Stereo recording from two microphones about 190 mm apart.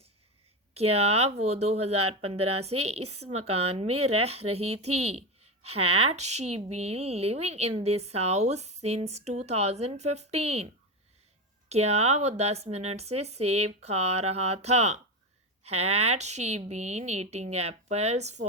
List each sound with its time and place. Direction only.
0.7 s speech: 35° right (ahead or behind)
11.7 s speech: 35° right (ahead or behind)